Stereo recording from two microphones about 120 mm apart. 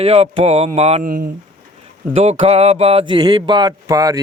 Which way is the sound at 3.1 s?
35° right (ahead or behind).